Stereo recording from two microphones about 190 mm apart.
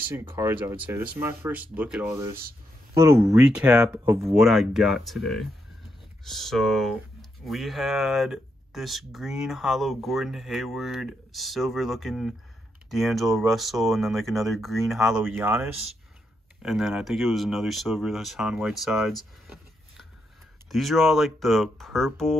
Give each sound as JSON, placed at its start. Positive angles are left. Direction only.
{"t": 0.1, "sound": "speech", "side_deg": -15}
{"t": 3.3, "sound": "speech", "side_deg": -5}
{"t": 20.7, "sound": "speech", "side_deg": 0}